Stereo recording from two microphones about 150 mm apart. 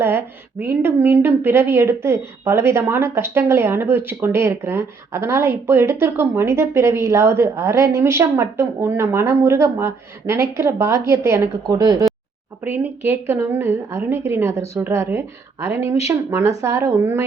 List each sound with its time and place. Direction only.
0.0 s a woman's voice: 15° right (ahead or behind)
11.6 s speech: 25° right (ahead or behind)
12.6 s a woman's voice: 10° right (ahead or behind)